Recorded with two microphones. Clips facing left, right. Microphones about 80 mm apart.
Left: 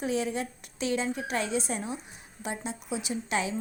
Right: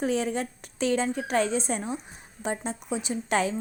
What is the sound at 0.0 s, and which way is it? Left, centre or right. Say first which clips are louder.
A woman's voice: right 3 dB; right.